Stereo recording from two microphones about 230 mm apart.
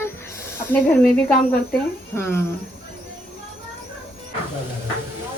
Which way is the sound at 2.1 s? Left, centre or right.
Centre.